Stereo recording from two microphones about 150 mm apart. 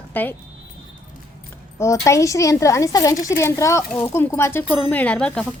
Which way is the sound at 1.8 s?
20° left (ahead or behind).